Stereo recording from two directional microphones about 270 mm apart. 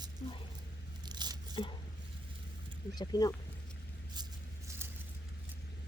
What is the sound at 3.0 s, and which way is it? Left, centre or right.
Speech, centre.